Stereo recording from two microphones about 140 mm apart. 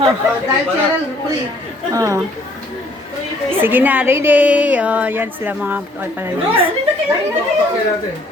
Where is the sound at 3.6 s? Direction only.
15° right (ahead or behind).